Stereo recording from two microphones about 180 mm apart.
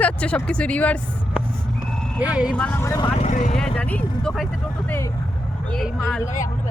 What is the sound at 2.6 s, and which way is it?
Speech, 10° left (ahead or behind).